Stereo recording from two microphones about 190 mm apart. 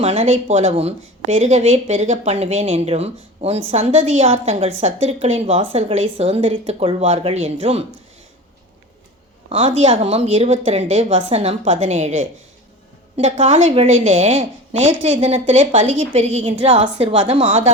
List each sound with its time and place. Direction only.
0.0 s a woman's voice: 30° right (ahead or behind)
9.5 s a woman's voice: 30° right (ahead or behind)